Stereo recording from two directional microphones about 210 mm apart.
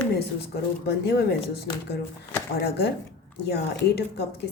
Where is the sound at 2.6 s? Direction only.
50° left (ahead or behind).